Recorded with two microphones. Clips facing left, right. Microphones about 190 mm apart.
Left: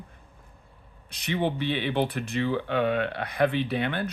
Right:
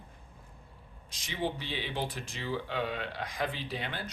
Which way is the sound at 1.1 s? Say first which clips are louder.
Left 7 dB; 65° left (ahead or behind).